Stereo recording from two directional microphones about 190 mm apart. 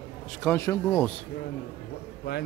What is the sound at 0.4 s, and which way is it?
Speech, 15° left (ahead or behind).